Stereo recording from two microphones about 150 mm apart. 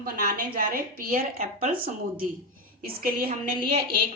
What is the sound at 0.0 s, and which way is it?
A woman's voice, 75° right (ahead or behind).